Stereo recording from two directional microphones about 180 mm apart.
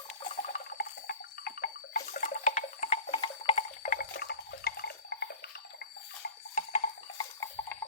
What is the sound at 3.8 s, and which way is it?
Water, 50° left (ahead or behind).